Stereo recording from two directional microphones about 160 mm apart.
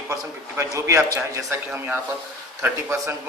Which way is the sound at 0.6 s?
20° right (ahead or behind).